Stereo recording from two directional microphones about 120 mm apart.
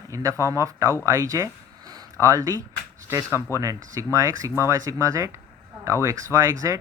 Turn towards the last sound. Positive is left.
turn(degrees=-25)  # may be behind; listen again after turning